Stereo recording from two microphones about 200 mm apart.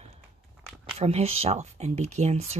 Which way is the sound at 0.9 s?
30° right (ahead or behind).